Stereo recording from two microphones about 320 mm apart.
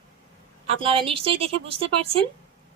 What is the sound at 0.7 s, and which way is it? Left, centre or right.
A woman's voice, centre.